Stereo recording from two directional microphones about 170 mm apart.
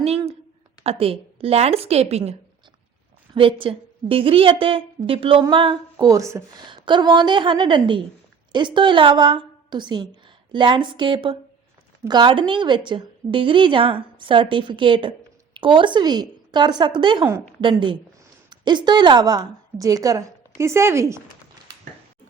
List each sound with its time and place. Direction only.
0.0 s a woman's voice: 35° right (ahead or behind)
3.3 s a woman's voice: 30° right (ahead or behind)